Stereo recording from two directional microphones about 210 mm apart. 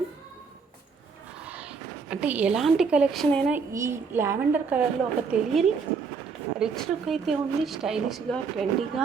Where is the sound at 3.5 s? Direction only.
15° right (ahead or behind).